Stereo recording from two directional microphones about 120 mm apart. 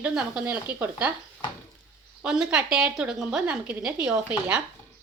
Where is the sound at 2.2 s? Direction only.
5° right (ahead or behind).